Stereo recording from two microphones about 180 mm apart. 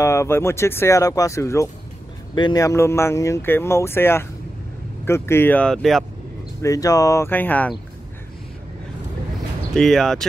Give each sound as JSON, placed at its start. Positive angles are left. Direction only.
{"t": 0.0, "sound": "speech", "side_deg": 15}
{"t": 6.6, "sound": "speech", "side_deg": 20}
{"t": 9.8, "sound": "speech", "side_deg": 0}